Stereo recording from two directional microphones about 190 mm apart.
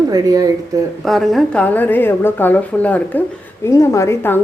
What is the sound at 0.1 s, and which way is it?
Speech, 20° right (ahead or behind).